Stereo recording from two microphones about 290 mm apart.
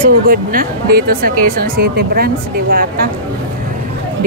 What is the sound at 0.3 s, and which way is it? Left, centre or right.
Speech, right.